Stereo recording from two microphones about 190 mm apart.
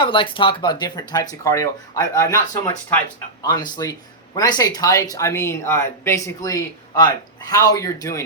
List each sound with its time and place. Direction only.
0.0 s speech: 25° left (ahead or behind)